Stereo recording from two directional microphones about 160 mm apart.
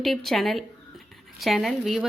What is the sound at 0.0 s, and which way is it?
A woman's voice, centre (ahead or behind).